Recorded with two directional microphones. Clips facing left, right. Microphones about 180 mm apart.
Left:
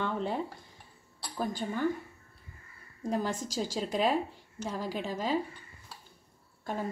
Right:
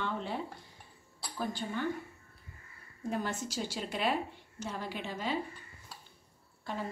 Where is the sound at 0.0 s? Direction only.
45° left (ahead or behind).